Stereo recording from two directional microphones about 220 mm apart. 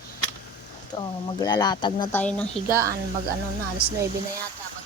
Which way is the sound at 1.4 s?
20° left (ahead or behind).